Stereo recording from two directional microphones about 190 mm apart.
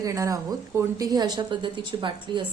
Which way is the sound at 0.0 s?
15° right (ahead or behind).